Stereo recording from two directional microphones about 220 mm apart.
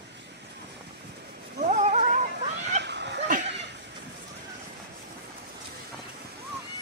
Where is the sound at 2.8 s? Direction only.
50° right (ahead or behind).